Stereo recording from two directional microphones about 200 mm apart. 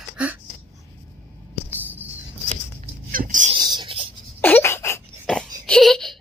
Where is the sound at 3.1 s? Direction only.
40° right (ahead or behind).